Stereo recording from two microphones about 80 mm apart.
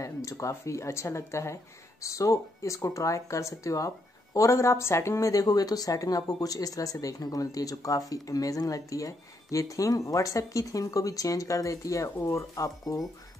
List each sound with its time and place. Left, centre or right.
0.0 s speech: left